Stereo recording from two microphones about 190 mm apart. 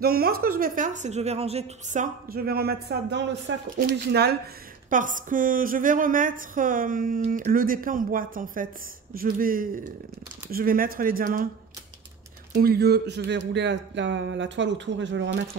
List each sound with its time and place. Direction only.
0.0 s a woman's voice: 50° right (ahead or behind)
4.8 s a woman's voice: 45° right (ahead or behind)
12.6 s speech: 55° right (ahead or behind)